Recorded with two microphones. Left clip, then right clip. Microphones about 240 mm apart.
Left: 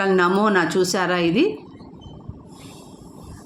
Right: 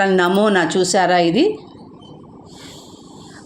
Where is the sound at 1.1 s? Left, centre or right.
Left.